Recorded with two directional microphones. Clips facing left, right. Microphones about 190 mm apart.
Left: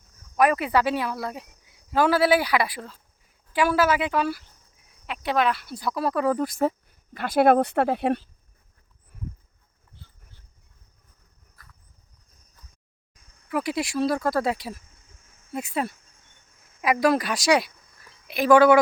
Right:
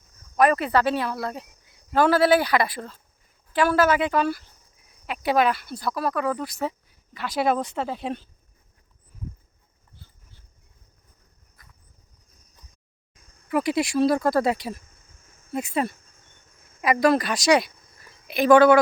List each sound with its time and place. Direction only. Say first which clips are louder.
0.3 s speech: right 1 dB; 10° left (ahead or behind)
5.7 s speech: right 1 dB; 15° left (ahead or behind)
6.0 s speech: left 3 dB; 30° left (ahead or behind); by 8.2 s 65° left (ahead or behind)
13.5 s speech: right 4 dB; centre (ahead or behind)